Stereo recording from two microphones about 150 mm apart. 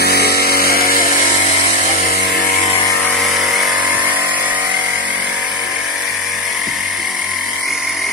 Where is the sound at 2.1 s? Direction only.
90° left.